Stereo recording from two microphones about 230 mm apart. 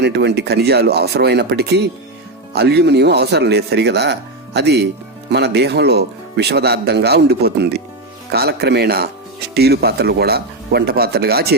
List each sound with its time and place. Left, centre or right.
0.0 s speech: right